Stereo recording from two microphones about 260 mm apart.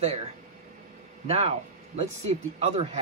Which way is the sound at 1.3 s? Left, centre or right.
Right.